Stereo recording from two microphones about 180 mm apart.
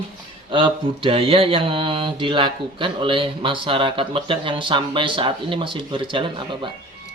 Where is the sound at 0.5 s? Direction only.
30° right (ahead or behind).